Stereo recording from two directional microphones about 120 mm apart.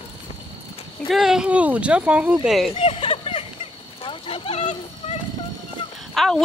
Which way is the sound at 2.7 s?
55° left (ahead or behind).